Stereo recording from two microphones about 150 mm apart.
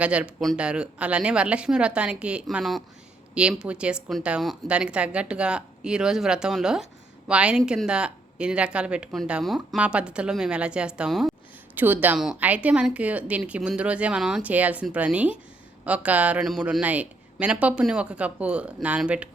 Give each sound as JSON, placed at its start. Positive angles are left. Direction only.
{"t": 0.0, "sound": "speech", "side_deg": -10}
{"t": 11.7, "sound": "speech", "side_deg": -10}